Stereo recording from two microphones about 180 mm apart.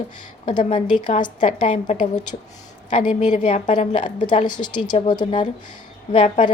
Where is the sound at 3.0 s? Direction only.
25° left (ahead or behind).